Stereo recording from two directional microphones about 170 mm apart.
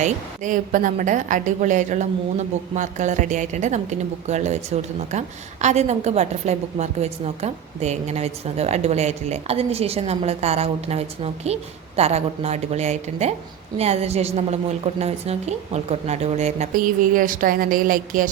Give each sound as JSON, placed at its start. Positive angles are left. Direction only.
{"t": 0.0, "sound": "a woman's voice", "side_deg": -50}